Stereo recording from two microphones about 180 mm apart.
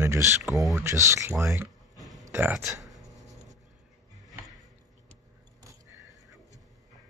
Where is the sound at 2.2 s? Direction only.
10° right (ahead or behind).